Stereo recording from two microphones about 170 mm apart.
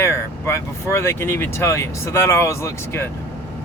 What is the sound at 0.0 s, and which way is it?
Speech, 15° left (ahead or behind).